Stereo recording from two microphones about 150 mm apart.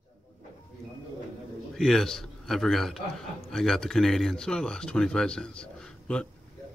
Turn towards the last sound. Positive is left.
turn(degrees=5)  # may be behind; listen again after turning